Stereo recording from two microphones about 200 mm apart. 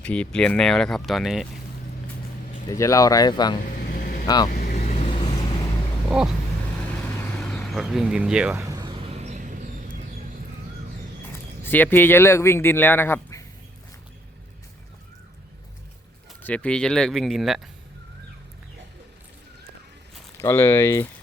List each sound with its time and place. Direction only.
0.0 s speech: 5° left (ahead or behind)
2.6 s speech: 15° left (ahead or behind)
3.9 s vehicle: 45° left (ahead or behind)
4.9 s vehicle: 30° left (ahead or behind)
6.1 s a sound: 5° right (ahead or behind)
7.3 s speech: centre (ahead or behind)
8.7 s vehicle: 20° right (ahead or behind); by 10.0 s 40° right (ahead or behind)
11.3 s speech: 10° left (ahead or behind)
16.4 s speech: 5° left (ahead or behind)
20.4 s speech: 10° left (ahead or behind)